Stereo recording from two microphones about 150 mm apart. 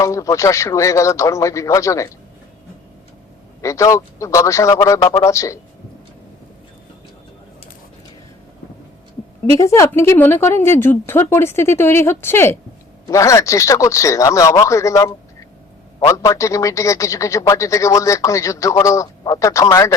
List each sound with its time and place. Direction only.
0.0 s a man's voice: 20° left (ahead or behind)
3.6 s a man's voice: 20° left (ahead or behind)
9.5 s a man's voice: 20° left (ahead or behind)